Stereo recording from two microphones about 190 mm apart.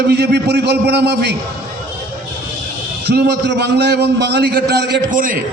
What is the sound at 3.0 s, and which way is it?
A man's voice, 60° right (ahead or behind).